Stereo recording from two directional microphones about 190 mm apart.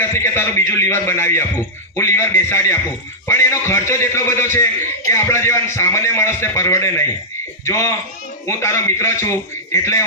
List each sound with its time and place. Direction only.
0.0 s a man's voice: 10° left (ahead or behind)